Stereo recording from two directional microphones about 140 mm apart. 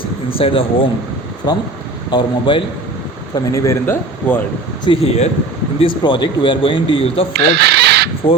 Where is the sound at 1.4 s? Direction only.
30° left (ahead or behind).